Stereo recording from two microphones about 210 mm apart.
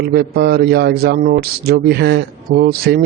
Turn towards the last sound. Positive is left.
turn(degrees=-45)  # may be behind; listen again after turning